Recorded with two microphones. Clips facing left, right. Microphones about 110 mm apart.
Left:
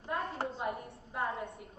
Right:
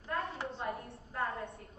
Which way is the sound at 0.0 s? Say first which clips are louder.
Left 2 dB; 25° left (ahead or behind).